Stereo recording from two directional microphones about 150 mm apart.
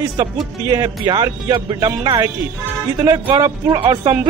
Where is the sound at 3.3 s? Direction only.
30° right (ahead or behind).